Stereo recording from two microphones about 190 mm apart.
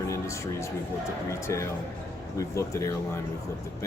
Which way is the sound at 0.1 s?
15° left (ahead or behind).